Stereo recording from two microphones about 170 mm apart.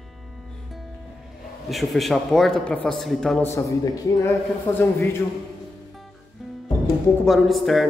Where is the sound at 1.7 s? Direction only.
Centre (ahead or behind).